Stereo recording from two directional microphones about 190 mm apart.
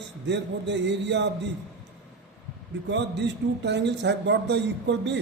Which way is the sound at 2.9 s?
65° right (ahead or behind).